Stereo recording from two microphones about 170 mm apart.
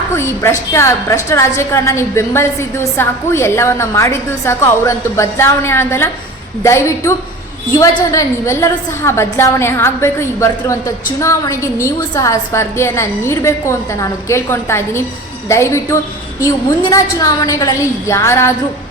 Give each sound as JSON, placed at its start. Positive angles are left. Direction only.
{"t": 0.2, "sound": "a woman's voice", "side_deg": 15}